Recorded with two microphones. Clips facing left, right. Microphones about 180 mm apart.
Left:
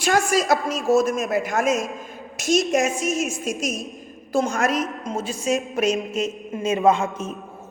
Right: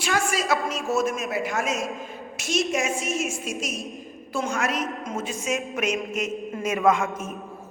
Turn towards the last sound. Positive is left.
turn(degrees=30)  # may be behind; listen again after turning